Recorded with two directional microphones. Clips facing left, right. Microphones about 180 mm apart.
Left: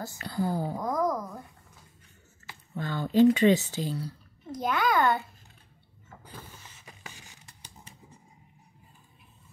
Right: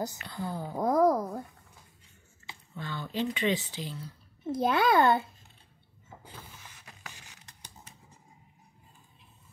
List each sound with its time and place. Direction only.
0.2 s a woman's voice: 35° left (ahead or behind)
0.7 s speech: 30° right (ahead or behind)
2.7 s speech: 45° left (ahead or behind)
4.5 s a child's voice: 30° right (ahead or behind)